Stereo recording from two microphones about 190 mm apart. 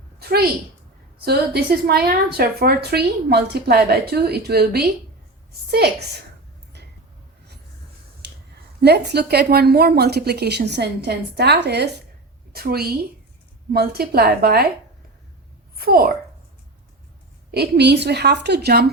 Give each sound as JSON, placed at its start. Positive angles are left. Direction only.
{"t": 0.2, "sound": "a woman's voice", "side_deg": -55}
{"t": 6.7, "sound": "a sound", "side_deg": -65}
{"t": 8.2, "sound": "a sound", "side_deg": -60}
{"t": 8.8, "sound": "a woman's voice", "side_deg": -60}
{"t": 15.7, "sound": "a child's voice", "side_deg": -50}
{"t": 17.5, "sound": "a woman's voice", "side_deg": -60}